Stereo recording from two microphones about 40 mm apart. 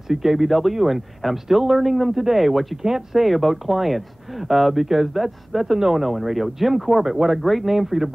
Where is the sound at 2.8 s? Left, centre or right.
Centre.